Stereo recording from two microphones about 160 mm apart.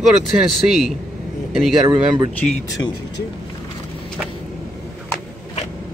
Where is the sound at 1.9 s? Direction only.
30° right (ahead or behind).